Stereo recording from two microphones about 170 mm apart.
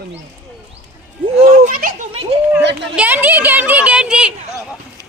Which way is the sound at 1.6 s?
55° right (ahead or behind).